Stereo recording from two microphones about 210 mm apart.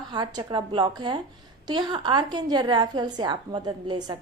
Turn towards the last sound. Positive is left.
turn(degrees=-20)  # may be behind; listen again after turning